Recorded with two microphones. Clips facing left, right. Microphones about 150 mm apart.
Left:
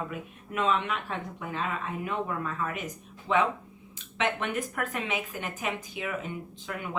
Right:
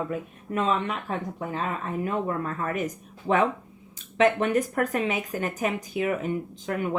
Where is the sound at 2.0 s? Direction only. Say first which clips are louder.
Right 4 dB; 40° right (ahead or behind).